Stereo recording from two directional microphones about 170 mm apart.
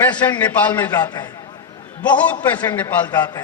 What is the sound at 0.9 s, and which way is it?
Speech, 25° left (ahead or behind).